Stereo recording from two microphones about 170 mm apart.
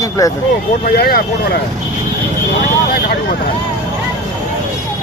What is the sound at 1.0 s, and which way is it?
Speech, 65° left (ahead or behind).